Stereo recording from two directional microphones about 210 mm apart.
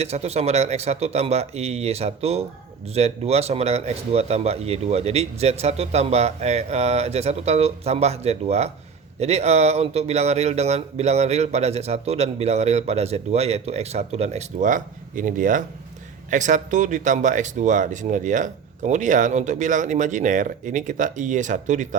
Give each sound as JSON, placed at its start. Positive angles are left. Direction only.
{"t": 0.0, "sound": "speech", "side_deg": -30}